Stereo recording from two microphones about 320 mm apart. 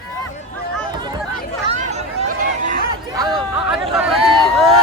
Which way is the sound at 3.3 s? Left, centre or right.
Centre.